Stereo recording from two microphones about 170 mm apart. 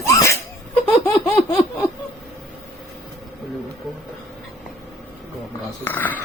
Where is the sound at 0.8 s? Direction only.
10° left (ahead or behind).